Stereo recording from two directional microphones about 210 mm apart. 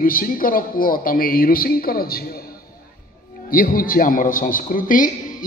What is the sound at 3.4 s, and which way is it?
A man's voice, 40° left (ahead or behind).